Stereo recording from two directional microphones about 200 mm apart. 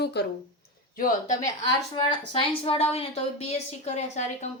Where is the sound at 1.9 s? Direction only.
25° left (ahead or behind).